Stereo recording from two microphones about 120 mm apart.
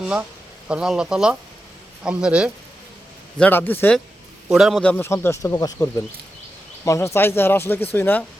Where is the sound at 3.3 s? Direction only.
15° left (ahead or behind).